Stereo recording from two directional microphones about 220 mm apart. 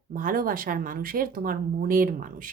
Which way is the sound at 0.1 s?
40° right (ahead or behind).